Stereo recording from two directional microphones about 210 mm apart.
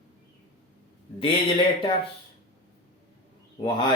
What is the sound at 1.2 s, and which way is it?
Speech, 20° left (ahead or behind).